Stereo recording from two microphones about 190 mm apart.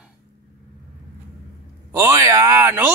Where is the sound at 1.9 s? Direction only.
15° right (ahead or behind).